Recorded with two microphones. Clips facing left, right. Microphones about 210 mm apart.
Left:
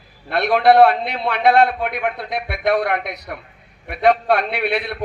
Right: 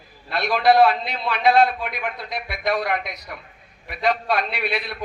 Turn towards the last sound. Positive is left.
turn(degrees=60)  # may be behind; listen again after turning